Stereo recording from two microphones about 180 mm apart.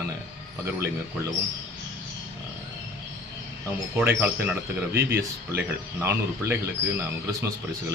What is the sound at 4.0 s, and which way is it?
Speech, 10° right (ahead or behind).